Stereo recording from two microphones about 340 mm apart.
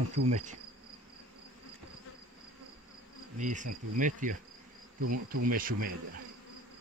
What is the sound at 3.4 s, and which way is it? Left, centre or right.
Speech, right.